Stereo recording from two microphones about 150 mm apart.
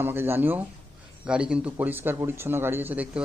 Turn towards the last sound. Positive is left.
turn(degrees=-10)  # may be behind; listen again after turning